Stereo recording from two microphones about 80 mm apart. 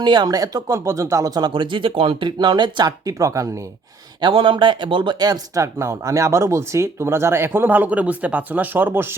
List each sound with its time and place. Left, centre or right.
0.0 s speech: right
3.0 s speech: right
4.2 s speech: right
5.2 s speech: right